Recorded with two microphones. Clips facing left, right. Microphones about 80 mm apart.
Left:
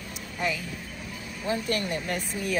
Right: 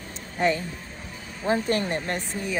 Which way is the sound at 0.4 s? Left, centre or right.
Right.